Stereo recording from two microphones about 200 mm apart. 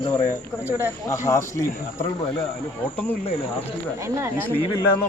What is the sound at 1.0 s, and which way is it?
A man's voice, 15° left (ahead or behind).